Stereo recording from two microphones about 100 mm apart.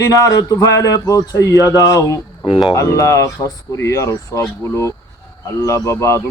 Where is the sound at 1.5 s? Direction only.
35° right (ahead or behind).